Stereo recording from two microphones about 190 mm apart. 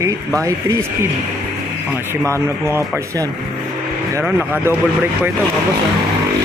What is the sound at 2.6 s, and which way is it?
Speech, 15° right (ahead or behind).